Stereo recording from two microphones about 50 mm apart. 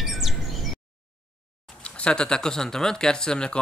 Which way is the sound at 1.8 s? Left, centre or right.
Left.